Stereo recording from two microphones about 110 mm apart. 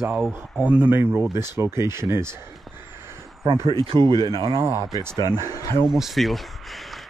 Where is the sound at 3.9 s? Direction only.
35° right (ahead or behind).